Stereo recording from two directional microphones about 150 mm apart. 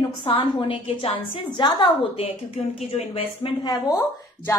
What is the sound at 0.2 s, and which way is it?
A woman's voice, 35° left (ahead or behind).